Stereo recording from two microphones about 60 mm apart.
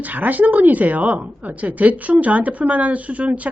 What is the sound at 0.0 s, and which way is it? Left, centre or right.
A woman's voice, right.